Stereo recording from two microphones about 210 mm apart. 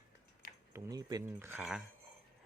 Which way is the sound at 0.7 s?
15° right (ahead or behind).